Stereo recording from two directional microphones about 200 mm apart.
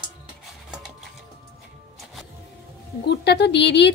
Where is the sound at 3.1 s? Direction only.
55° left (ahead or behind).